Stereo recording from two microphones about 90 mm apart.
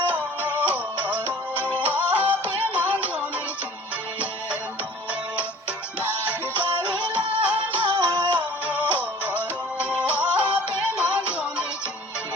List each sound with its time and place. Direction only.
0.1 s music: 20° right (ahead or behind)
1.7 s music: 20° right (ahead or behind)
2.4 s music: 25° left (ahead or behind)
2.7 s music: 20° right (ahead or behind)
6.8 s music: 25° left (ahead or behind)
7.2 s music: 15° right (ahead or behind)
7.9 s music: 65° right (ahead or behind)
8.6 s music: 15° right (ahead or behind)